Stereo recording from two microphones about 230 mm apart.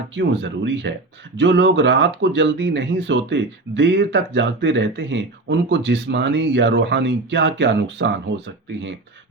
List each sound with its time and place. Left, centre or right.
0.1 s speech: right